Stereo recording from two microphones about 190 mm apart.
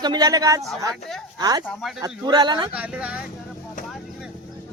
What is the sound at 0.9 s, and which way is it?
Speech, centre (ahead or behind).